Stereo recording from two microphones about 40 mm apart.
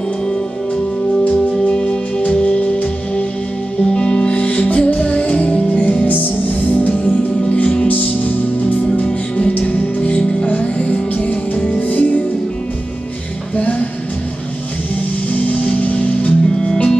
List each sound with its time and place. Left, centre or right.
1.6 s music: left
6.0 s music: left
6.6 s music: left
7.4 s music: left
7.9 s music: left
11.5 s music: left
11.9 s music: left
13.6 s music: left
15.3 s music: left
16.4 s music: centre